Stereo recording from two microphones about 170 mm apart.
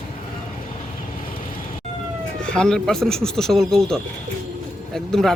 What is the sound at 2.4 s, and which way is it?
Speech, 5° left (ahead or behind).